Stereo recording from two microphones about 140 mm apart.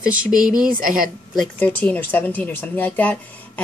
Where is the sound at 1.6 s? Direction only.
10° left (ahead or behind).